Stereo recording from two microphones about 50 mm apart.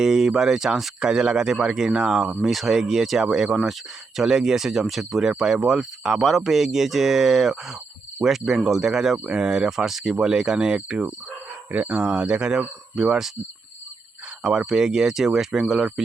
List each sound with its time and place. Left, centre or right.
0.0 s speech: centre
2.4 s speech: centre
11.7 s speech: right; by 13.3 s centre
14.7 s speech: centre